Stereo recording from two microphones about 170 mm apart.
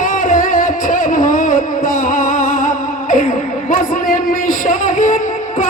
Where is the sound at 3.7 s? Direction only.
50° left (ahead or behind).